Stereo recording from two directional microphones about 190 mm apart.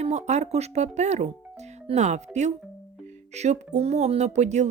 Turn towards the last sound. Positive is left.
turn(degrees=-35)  # may be behind; listen again after turning